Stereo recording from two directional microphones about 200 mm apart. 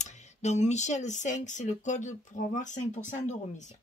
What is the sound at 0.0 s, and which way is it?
Speech, 35° left (ahead or behind).